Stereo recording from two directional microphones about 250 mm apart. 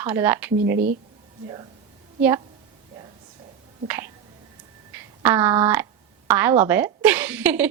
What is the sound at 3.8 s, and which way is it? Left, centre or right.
A woman's voice, centre.